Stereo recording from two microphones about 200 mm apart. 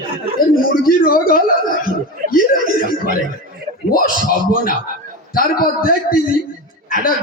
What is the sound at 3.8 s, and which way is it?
Speech, 45° left (ahead or behind).